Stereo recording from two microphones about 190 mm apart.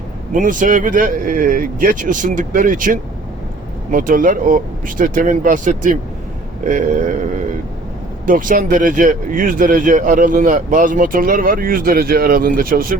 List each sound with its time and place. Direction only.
0.3 s speech: 45° right (ahead or behind)